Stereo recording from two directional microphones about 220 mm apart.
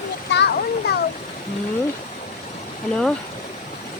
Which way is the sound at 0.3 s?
50° left (ahead or behind).